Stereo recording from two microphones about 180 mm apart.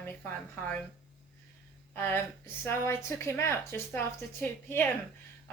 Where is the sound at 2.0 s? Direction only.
10° left (ahead or behind).